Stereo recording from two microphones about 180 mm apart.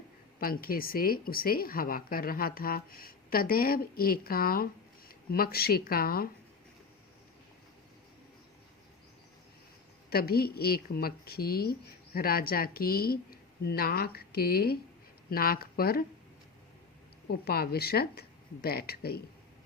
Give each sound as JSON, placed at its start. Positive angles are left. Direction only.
{"t": 0.3, "sound": "a woman's voice", "side_deg": 55}
{"t": 10.1, "sound": "a woman's voice", "side_deg": 60}
{"t": 17.2, "sound": "a woman's voice", "side_deg": 60}